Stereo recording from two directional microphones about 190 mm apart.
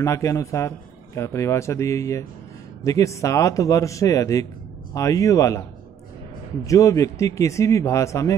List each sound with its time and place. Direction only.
0.0 s a man's voice: 15° left (ahead or behind)
6.6 s a man's voice: 15° left (ahead or behind)